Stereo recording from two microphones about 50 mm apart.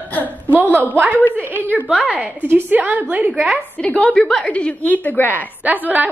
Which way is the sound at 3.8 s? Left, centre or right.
Left.